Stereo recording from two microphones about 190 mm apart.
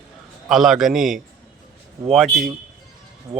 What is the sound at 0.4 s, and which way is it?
Speech, centre (ahead or behind).